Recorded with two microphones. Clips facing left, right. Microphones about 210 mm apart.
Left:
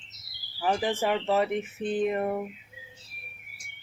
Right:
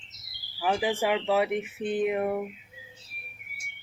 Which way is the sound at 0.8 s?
15° right (ahead or behind).